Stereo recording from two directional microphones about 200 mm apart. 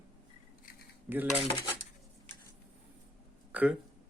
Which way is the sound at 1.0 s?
10° right (ahead or behind).